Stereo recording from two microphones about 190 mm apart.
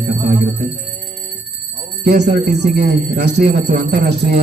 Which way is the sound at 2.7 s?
60° right (ahead or behind).